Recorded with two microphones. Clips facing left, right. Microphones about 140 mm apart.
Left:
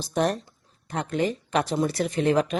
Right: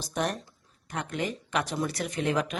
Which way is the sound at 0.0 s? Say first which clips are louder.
Left 6 dB; 30° left (ahead or behind).